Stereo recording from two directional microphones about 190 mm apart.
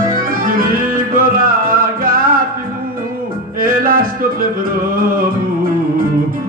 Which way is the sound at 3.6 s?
50° right (ahead or behind).